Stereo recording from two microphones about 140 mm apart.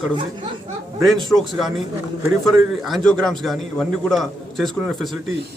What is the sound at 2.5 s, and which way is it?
A man's voice, centre (ahead or behind).